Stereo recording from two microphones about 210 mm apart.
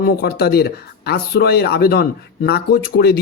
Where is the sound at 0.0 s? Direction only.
50° left (ahead or behind).